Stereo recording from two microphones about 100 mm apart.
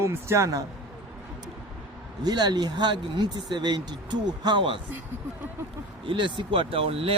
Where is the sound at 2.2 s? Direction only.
45° right (ahead or behind).